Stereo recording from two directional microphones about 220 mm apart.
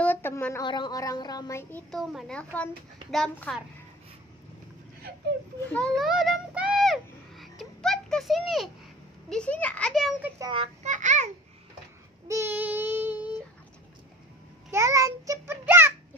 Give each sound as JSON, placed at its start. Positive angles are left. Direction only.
{"t": 0.0, "sound": "speech", "side_deg": 10}
{"t": 5.7, "sound": "a sound", "side_deg": 5}
{"t": 9.3, "sound": "a child's voice", "side_deg": 5}
{"t": 10.4, "sound": "a child's voice", "side_deg": -25}
{"t": 12.3, "sound": "child singing", "side_deg": -10}
{"t": 14.7, "sound": "a child's voice", "side_deg": -15}